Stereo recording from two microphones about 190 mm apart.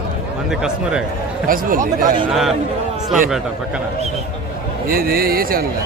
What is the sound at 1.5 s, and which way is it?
Speech, 45° right (ahead or behind).